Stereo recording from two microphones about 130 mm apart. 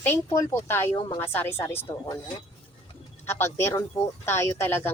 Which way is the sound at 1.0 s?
35° left (ahead or behind).